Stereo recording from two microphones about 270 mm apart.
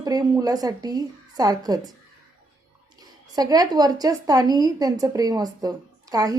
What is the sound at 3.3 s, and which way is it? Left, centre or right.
Speech, centre.